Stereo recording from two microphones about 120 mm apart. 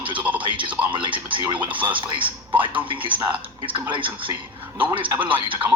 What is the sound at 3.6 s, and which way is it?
Speech, 45° right (ahead or behind).